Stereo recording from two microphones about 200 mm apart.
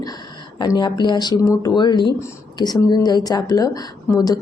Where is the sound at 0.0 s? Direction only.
20° left (ahead or behind).